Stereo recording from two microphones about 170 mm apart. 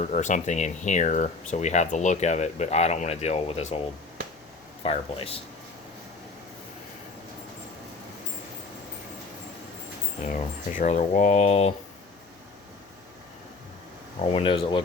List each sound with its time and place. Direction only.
0.0 s speech: 45° left (ahead or behind)
4.8 s speech: 35° left (ahead or behind)
10.3 s speech: 50° left (ahead or behind)
14.2 s speech: 35° left (ahead or behind)